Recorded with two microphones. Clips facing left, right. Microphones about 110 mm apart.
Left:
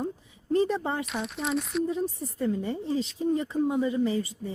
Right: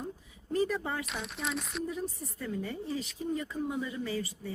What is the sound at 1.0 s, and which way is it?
Speech, centre (ahead or behind).